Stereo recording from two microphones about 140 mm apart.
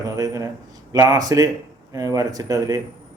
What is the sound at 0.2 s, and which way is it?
Speech, 25° right (ahead or behind).